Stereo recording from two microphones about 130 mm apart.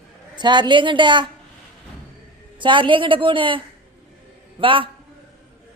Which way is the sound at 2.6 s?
40° right (ahead or behind).